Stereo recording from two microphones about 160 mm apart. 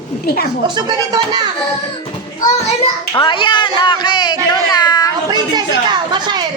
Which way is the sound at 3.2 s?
30° left (ahead or behind).